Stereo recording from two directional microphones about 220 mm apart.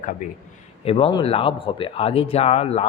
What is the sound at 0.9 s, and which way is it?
Speech, 25° left (ahead or behind).